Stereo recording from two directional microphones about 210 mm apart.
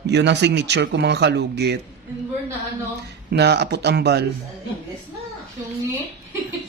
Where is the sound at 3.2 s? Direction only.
50° right (ahead or behind).